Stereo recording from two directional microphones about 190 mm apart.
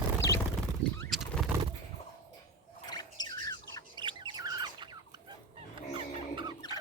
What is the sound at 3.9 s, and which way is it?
Squawk, 25° right (ahead or behind).